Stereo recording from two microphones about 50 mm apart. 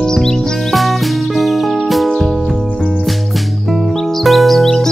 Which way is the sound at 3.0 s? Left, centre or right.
Centre.